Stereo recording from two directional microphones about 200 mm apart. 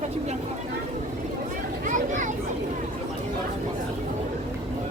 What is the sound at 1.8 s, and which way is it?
Children playing, 40° right (ahead or behind).